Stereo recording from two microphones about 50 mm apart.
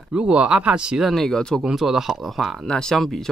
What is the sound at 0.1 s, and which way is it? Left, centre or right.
Speech, right.